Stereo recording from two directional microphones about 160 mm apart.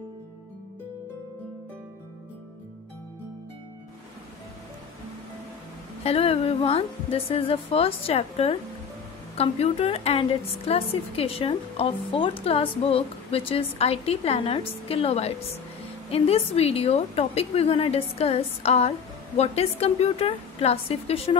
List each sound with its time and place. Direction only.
6.0 s a woman's voice: 40° left (ahead or behind)